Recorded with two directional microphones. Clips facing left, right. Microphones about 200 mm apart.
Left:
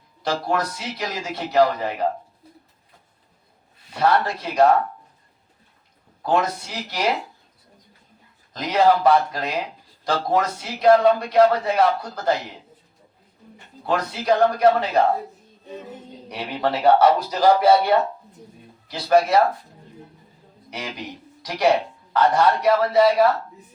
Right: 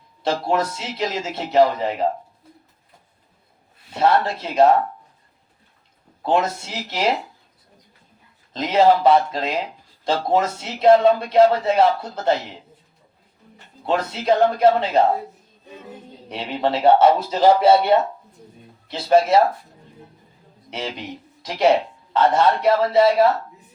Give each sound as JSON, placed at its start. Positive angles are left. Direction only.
{"t": 0.2, "sound": "a man's voice", "side_deg": -25}
{"t": 3.9, "sound": "a man's voice", "side_deg": -25}
{"t": 6.2, "sound": "a man's voice", "side_deg": -25}
{"t": 8.5, "sound": "a man's voice", "side_deg": -25}
{"t": 13.8, "sound": "a man's voice", "side_deg": -25}
{"t": 16.3, "sound": "a man's voice", "side_deg": -25}
{"t": 20.7, "sound": "a man's voice", "side_deg": -25}